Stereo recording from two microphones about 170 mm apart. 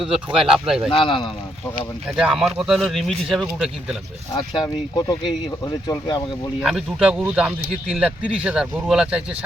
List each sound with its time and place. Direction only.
0.3 s speech: 5° right (ahead or behind)
0.9 s speech: 30° left (ahead or behind)
2.1 s speech: centre (ahead or behind)
4.4 s speech: 25° left (ahead or behind)
6.6 s speech: 5° right (ahead or behind)